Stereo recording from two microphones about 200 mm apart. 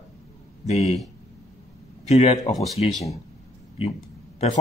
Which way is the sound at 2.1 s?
30° left (ahead or behind).